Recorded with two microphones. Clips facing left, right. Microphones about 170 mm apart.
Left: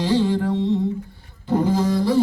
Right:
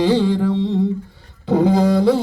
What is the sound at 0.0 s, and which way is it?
Music, 90° right.